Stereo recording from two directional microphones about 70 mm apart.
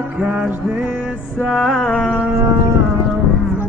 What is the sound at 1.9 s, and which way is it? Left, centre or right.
Music, centre.